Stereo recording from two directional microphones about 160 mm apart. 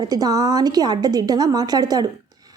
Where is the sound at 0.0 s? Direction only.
25° right (ahead or behind).